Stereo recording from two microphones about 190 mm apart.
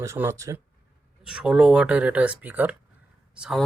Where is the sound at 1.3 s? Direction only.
5° right (ahead or behind).